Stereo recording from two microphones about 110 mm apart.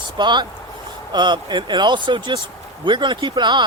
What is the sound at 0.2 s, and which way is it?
Speech, 45° right (ahead or behind).